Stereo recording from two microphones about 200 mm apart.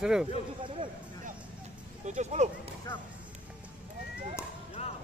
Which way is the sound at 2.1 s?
35° right (ahead or behind).